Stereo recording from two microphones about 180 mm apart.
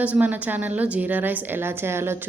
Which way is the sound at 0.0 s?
10° right (ahead or behind).